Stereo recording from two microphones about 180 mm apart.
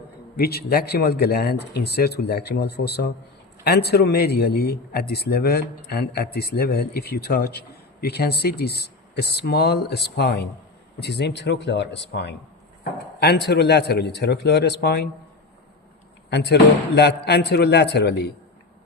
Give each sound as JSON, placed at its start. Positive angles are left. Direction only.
{"t": 0.3, "sound": "speech", "side_deg": 60}
{"t": 16.3, "sound": "speech", "side_deg": 70}